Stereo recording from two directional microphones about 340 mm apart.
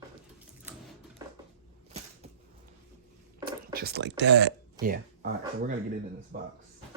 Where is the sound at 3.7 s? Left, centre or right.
Right.